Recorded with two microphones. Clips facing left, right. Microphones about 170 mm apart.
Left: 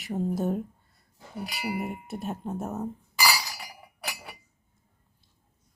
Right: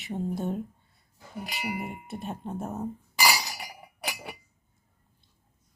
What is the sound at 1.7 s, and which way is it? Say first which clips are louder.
Speech: left 3 dB; centre (ahead or behind).